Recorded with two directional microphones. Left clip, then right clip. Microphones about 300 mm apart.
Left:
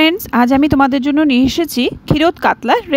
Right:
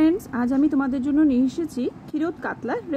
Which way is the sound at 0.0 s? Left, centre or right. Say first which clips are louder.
Left 9 dB; left.